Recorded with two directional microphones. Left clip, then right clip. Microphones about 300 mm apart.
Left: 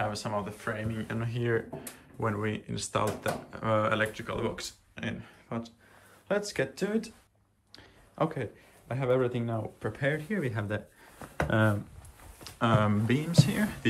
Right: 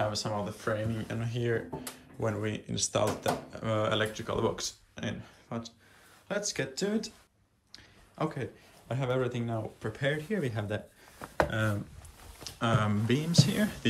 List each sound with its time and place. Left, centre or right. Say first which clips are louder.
0.0 s speech: even; centre
12.4 s speech: left 3 dB; centre